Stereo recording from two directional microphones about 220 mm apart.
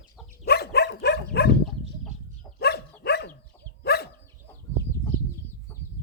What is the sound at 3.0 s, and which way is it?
Dog, 50° left (ahead or behind).